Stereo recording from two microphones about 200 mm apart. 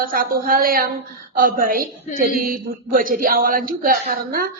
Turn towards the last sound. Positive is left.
turn(degrees=-50)  # may be behind; listen again after turning